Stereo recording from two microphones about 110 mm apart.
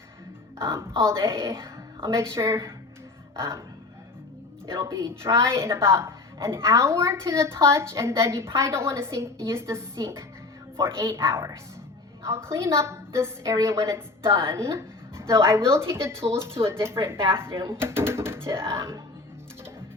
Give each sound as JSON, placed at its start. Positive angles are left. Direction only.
{"t": 0.6, "sound": "a woman's voice", "side_deg": -25}
{"t": 4.6, "sound": "a woman's voice", "side_deg": -25}